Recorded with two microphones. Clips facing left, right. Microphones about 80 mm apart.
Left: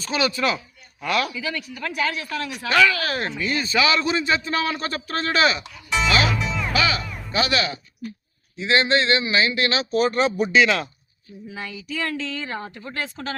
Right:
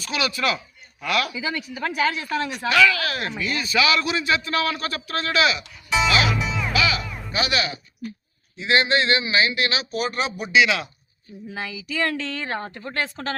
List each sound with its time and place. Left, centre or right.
0.0 s a man's voice: left
1.3 s speech: centre
2.7 s a man's voice: left
6.4 s music: centre
6.7 s music: left
7.3 s speech: centre
11.5 s a woman's voice: right